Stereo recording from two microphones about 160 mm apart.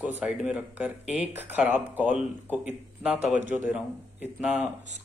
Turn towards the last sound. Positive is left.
turn(degrees=-5)  # may be behind; listen again after turning